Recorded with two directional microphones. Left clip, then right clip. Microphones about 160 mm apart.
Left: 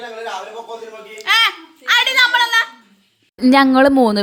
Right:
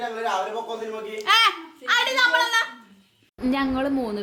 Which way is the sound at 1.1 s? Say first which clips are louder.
Left 4 dB; centre (ahead or behind).